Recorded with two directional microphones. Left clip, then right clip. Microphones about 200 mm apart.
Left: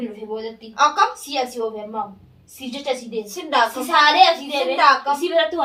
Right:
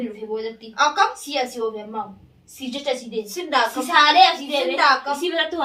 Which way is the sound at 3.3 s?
5° left (ahead or behind).